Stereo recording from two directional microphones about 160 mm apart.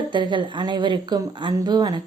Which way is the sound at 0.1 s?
30° right (ahead or behind).